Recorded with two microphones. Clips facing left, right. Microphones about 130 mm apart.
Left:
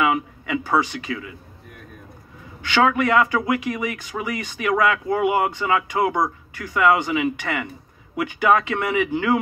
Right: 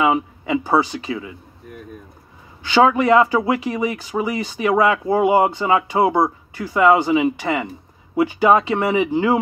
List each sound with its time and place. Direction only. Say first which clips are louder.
0.0 s speech: right 3 dB; 30° right (ahead or behind)
2.6 s speech: right 4 dB; 30° right (ahead or behind)